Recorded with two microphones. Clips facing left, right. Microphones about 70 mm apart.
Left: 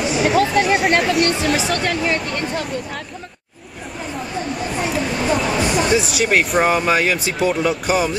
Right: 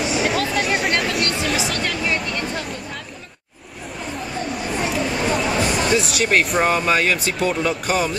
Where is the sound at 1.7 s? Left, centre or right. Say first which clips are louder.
Left 4 dB; left.